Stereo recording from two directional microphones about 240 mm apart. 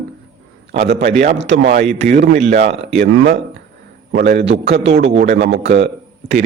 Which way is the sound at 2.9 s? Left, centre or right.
Right.